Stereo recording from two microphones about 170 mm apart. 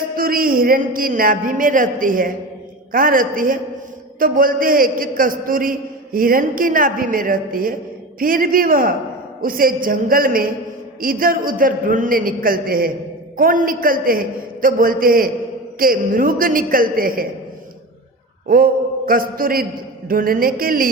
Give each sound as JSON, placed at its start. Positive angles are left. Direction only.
{"t": 0.2, "sound": "a man's voice", "side_deg": -55}
{"t": 18.4, "sound": "a man's voice", "side_deg": -55}